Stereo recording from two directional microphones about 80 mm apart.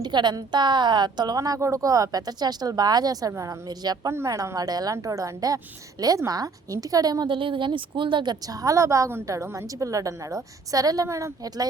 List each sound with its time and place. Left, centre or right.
0.0 s a woman's voice: right
1.4 s a woman's voice: right
3.7 s speech: right
4.1 s a woman's voice: right
4.5 s a woman's voice: right
7.3 s a woman's voice: right